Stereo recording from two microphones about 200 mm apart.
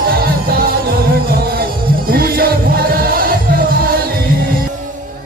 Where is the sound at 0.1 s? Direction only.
50° right (ahead or behind).